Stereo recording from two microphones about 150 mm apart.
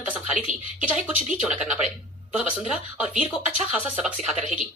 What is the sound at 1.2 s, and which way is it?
Speech, 5° right (ahead or behind).